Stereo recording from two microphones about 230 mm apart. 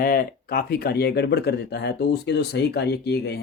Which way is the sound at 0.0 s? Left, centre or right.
Left.